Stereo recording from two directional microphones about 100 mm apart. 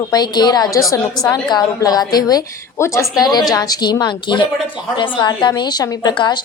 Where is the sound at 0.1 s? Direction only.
45° left (ahead or behind).